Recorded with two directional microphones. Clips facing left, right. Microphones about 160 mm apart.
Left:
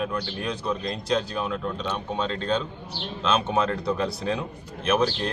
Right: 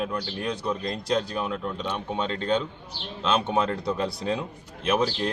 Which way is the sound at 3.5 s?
20° right (ahead or behind).